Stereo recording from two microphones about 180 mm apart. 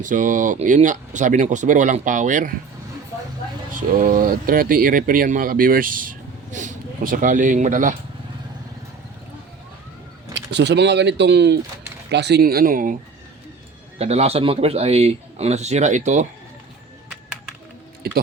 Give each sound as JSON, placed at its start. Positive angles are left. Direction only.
{"t": 0.0, "sound": "speech", "side_deg": -45}
{"t": 3.8, "sound": "speech", "side_deg": -50}
{"t": 10.3, "sound": "speech", "side_deg": -70}
{"t": 14.0, "sound": "a man's voice", "side_deg": -35}